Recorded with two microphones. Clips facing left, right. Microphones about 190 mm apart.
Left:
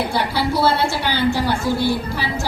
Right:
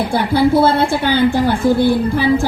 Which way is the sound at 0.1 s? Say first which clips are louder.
Right 8 dB; 50° right (ahead or behind).